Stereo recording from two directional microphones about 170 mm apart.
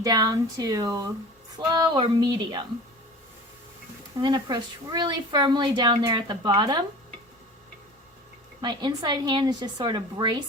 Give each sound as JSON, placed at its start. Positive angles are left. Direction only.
{"t": 0.0, "sound": "speech", "side_deg": -20}
{"t": 4.2, "sound": "speech", "side_deg": -25}
{"t": 8.6, "sound": "speech", "side_deg": -25}